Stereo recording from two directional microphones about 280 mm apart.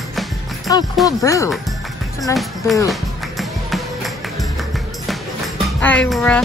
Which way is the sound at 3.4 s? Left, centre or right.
Centre.